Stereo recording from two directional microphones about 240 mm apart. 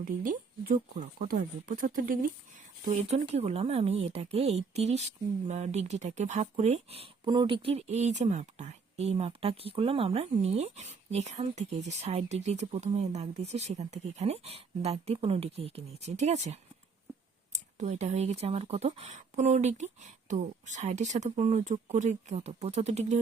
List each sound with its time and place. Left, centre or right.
0.9 s speech: right